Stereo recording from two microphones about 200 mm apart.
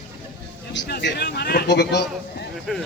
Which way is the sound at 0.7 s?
60° left (ahead or behind).